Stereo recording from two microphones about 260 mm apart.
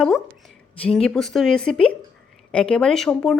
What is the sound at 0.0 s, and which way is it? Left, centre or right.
A woman's voice, centre.